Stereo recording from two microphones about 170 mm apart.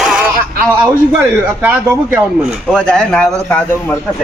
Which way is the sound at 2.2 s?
Centre (ahead or behind).